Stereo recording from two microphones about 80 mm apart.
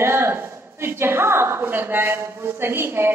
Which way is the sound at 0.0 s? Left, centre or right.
Right.